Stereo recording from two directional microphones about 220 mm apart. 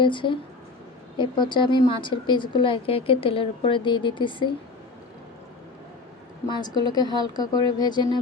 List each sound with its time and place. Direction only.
0.0 s speech: 20° left (ahead or behind)
6.5 s speech: 20° left (ahead or behind)